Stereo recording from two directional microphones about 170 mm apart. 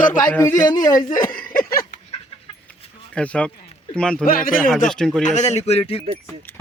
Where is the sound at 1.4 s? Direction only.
60° left (ahead or behind).